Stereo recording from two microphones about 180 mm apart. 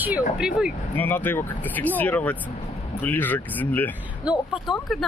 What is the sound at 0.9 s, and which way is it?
Speech, 10° left (ahead or behind).